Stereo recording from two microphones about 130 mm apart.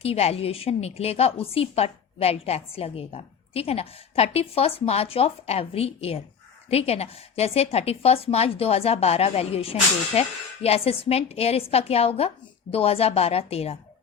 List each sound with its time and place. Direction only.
0.0 s a woman's voice: 50° left (ahead or behind)